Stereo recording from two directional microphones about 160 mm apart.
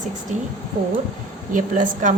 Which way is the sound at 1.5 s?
55° right (ahead or behind).